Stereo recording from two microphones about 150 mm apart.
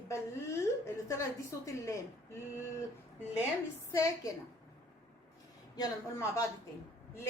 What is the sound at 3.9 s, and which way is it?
Speech, 20° left (ahead or behind).